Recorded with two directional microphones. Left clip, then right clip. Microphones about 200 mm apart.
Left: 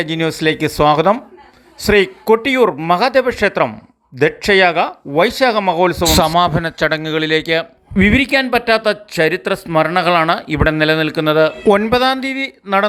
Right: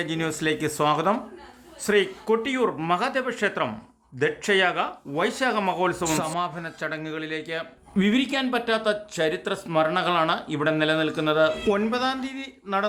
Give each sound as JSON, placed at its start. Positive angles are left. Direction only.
{"t": 0.0, "sound": "a man's voice", "side_deg": 25}
{"t": 6.3, "sound": "a man's voice", "side_deg": 40}
{"t": 12.7, "sound": "a man's voice", "side_deg": 20}